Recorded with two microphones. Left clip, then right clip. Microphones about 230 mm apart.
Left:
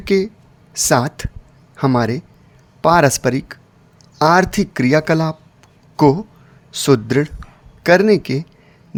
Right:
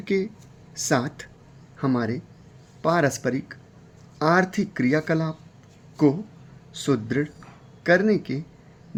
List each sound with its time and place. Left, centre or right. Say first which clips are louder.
0.0 s a man's voice: left 9 dB; left
6.7 s speech: left 10 dB; left